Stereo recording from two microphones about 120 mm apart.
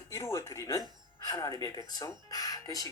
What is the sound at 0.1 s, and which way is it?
Speech, 25° left (ahead or behind).